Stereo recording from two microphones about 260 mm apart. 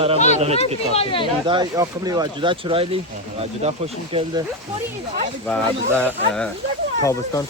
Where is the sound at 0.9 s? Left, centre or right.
Centre.